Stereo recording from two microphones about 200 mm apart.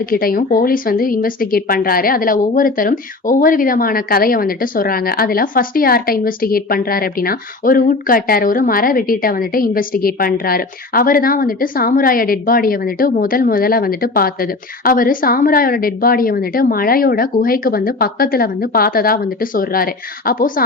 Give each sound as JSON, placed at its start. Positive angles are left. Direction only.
{"t": 0.0, "sound": "a woman's voice", "side_deg": 45}